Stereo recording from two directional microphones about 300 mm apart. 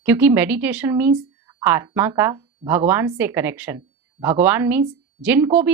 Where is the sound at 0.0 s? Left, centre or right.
Centre.